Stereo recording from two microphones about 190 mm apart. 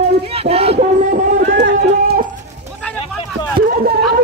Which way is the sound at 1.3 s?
65° right (ahead or behind).